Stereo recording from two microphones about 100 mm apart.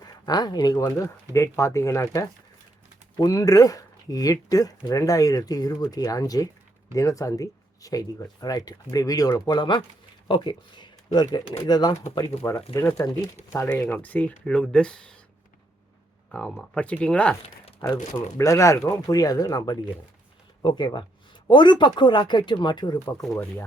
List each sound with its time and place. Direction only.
0.3 s speech: 40° left (ahead or behind)
0.9 s speech: 30° left (ahead or behind)
12.7 s speech: 25° left (ahead or behind)
13.7 s speech: 15° left (ahead or behind)
16.3 s speech: 10° left (ahead or behind)
18.3 s speech: 30° left (ahead or behind); by 23.0 s 50° left (ahead or behind)